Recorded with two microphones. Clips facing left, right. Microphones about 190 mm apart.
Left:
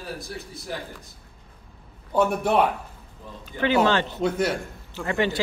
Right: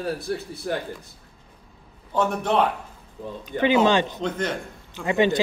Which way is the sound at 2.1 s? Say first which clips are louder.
Left 1 dB; 10° left (ahead or behind).